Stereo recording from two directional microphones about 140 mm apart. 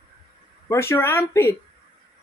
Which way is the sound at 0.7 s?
20° left (ahead or behind).